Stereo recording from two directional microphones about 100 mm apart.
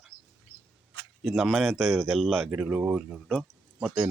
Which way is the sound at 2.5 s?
15° right (ahead or behind).